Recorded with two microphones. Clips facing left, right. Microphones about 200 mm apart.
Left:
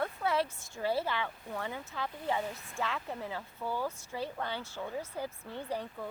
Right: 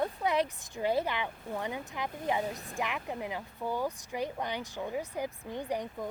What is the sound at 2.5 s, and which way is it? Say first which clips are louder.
Speech: right 4 dB; 35° right (ahead or behind).